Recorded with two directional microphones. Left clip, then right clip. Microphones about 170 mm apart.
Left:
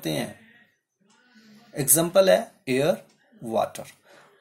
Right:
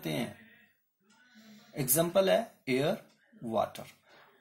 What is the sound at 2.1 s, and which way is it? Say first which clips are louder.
Speech: left 10 dB; 40° left (ahead or behind).